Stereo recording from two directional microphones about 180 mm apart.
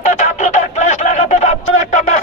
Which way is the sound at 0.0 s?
40° left (ahead or behind).